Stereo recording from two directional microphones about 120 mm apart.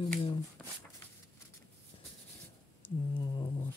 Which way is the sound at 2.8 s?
45° left (ahead or behind).